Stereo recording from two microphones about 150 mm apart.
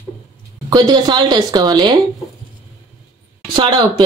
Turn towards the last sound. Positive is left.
turn(degrees=-30)  # may be behind; listen again after turning